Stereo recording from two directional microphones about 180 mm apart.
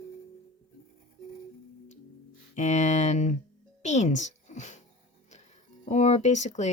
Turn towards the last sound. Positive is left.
turn(degrees=40)  # may be behind; listen again after turning